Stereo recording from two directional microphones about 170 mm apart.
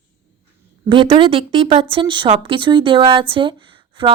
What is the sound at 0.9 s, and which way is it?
A woman's voice, 30° right (ahead or behind).